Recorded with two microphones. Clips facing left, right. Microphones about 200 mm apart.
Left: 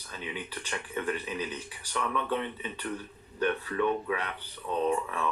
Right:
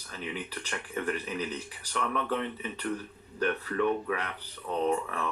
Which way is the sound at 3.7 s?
45° right (ahead or behind).